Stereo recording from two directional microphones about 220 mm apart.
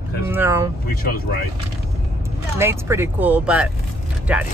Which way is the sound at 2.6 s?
10° right (ahead or behind).